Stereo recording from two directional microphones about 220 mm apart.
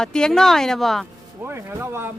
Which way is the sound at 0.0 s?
5° left (ahead or behind).